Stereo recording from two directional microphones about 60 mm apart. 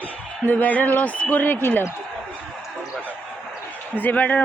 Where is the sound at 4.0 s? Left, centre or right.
Left.